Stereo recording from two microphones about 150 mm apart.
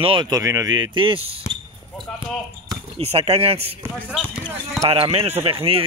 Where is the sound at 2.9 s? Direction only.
45° right (ahead or behind).